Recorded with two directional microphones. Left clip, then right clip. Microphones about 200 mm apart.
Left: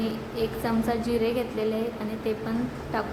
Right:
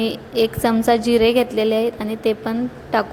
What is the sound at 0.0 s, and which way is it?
A woman's voice, 40° right (ahead or behind).